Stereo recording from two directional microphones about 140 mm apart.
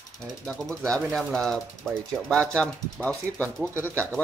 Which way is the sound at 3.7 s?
15° right (ahead or behind).